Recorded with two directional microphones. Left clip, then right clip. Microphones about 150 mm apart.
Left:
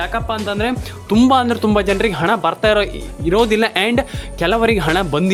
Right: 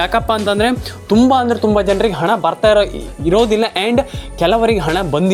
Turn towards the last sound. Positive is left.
turn(degrees=0)  # may be behind; listen again after turning